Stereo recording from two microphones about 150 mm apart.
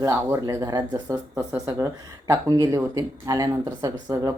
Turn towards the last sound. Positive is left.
turn(degrees=-25)  # may be behind; listen again after turning